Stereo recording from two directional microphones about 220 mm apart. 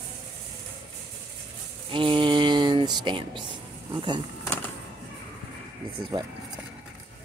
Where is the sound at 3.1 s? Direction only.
20° right (ahead or behind).